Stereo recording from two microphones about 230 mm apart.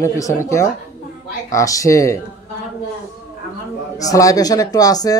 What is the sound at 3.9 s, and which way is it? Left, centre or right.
Speech, centre.